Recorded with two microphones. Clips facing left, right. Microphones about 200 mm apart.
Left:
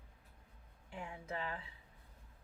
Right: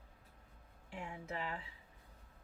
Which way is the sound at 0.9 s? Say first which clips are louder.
Even; 25° right (ahead or behind).